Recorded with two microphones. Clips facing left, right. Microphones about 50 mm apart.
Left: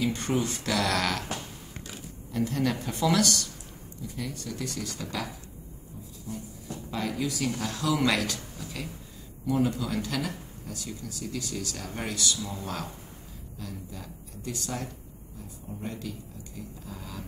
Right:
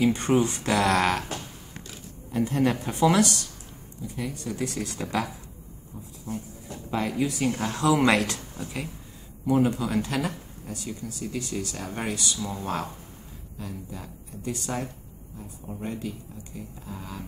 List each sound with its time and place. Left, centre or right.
0.0 s speech: right
2.3 s speech: right
6.7 s speech: right